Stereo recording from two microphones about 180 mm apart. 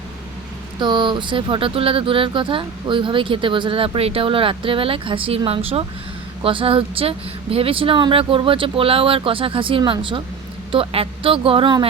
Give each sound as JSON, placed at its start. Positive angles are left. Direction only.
{"t": 0.8, "sound": "speech", "side_deg": -25}